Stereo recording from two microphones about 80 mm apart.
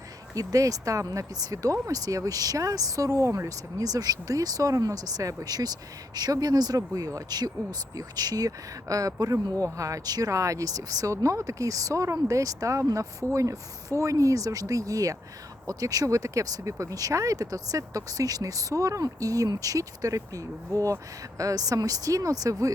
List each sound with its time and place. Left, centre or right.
0.3 s speech: right